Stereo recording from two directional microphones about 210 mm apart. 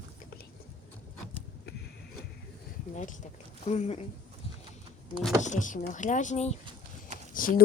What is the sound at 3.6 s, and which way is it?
Speech, 30° left (ahead or behind).